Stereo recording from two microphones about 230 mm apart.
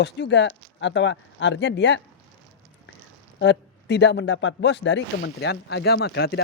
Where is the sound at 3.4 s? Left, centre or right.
Left.